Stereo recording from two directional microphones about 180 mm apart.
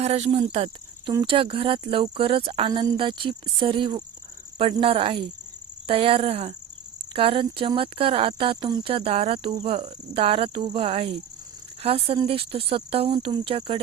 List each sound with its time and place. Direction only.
0.0 s speech: 35° right (ahead or behind)